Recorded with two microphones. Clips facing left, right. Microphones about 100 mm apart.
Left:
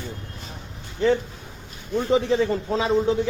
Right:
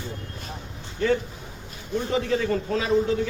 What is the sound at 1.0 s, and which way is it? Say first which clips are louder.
A man's voice: left 3 dB; 20° left (ahead or behind).